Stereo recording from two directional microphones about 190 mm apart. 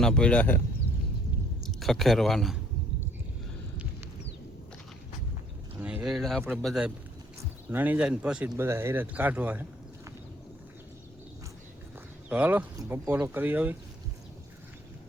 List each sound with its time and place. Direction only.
0.0 s speech: 5° left (ahead or behind)
1.8 s speech: centre (ahead or behind)
5.8 s speech: 5° right (ahead or behind)
12.3 s speech: 10° right (ahead or behind)